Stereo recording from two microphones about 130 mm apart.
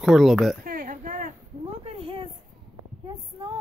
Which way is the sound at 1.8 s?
50° right (ahead or behind).